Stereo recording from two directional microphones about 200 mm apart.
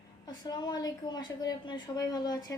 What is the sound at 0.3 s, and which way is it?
A woman's voice, 20° left (ahead or behind).